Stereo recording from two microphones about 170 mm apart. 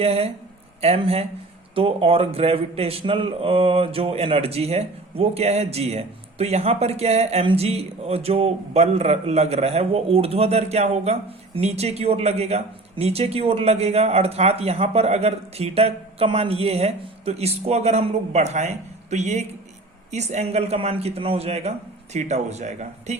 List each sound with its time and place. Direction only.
0.0 s a man's voice: 35° right (ahead or behind)